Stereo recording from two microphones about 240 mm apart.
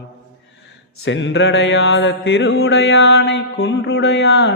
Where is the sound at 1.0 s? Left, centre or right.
Left.